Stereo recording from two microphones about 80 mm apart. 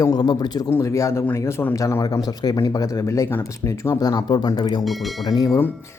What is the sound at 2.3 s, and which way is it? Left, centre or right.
Speech, left.